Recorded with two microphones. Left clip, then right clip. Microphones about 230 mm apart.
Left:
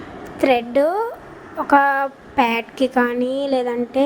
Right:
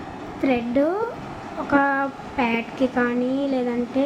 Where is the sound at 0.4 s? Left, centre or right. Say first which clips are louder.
Left 5 dB; left.